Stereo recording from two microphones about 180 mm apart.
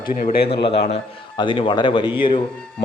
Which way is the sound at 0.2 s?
50° left (ahead or behind).